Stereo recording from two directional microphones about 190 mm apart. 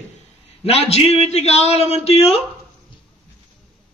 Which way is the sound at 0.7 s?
35° left (ahead or behind).